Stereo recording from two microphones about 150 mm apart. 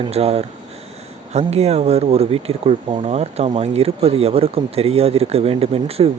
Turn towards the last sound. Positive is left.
turn(degrees=-40)  # may be behind; listen again after turning